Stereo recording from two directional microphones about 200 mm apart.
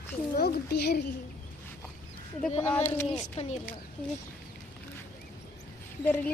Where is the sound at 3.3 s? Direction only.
30° left (ahead or behind).